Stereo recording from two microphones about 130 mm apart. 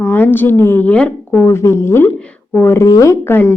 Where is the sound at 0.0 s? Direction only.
15° left (ahead or behind).